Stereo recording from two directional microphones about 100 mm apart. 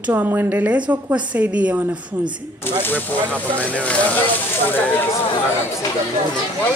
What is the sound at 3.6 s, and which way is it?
Speech, 15° left (ahead or behind).